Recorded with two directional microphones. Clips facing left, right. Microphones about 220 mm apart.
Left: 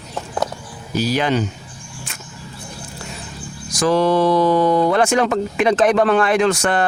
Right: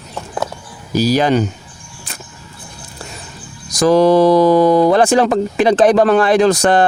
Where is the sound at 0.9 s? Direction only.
40° right (ahead or behind).